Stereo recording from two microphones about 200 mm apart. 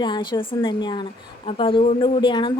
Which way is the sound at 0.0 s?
25° left (ahead or behind).